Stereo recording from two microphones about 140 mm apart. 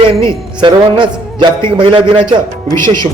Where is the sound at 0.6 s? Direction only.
35° right (ahead or behind).